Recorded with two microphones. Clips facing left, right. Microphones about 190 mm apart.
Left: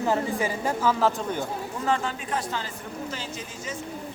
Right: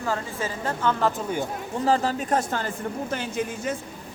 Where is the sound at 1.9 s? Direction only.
35° right (ahead or behind); by 3.7 s 60° right (ahead or behind).